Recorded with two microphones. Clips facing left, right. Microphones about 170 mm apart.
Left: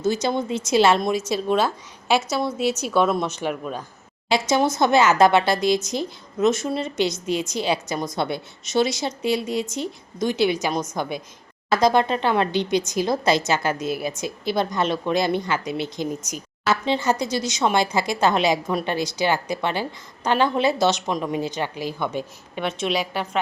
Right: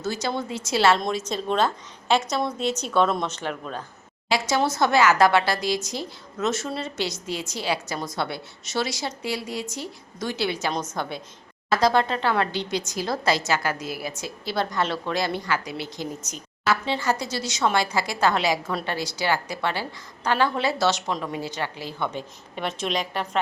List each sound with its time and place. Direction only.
0.0 s a woman's voice: 20° left (ahead or behind)